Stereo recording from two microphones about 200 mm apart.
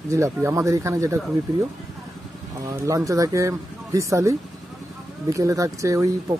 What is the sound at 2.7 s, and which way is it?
Speech, 15° right (ahead or behind).